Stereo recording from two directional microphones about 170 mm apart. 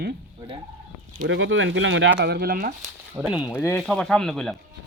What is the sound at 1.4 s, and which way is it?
Speech, 90° right.